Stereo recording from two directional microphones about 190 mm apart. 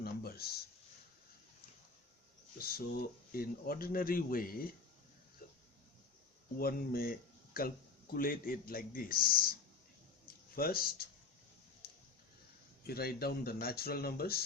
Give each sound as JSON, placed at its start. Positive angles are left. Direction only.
{"t": 0.0, "sound": "a sound", "side_deg": 55}
{"t": 2.6, "sound": "speech", "side_deg": 55}
{"t": 6.6, "sound": "speech", "side_deg": 50}
{"t": 10.5, "sound": "speech", "side_deg": 50}
{"t": 12.9, "sound": "speech", "side_deg": 55}